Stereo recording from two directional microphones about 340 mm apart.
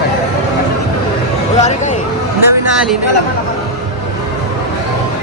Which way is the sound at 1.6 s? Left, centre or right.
Left.